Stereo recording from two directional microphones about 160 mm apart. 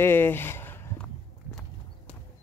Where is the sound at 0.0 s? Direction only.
15° left (ahead or behind).